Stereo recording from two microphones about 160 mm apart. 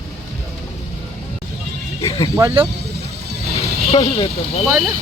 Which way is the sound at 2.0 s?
25° left (ahead or behind).